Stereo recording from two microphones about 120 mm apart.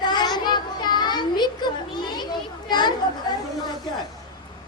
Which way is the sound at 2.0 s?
40° left (ahead or behind).